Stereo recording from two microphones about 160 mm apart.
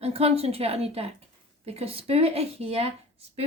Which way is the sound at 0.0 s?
40° right (ahead or behind).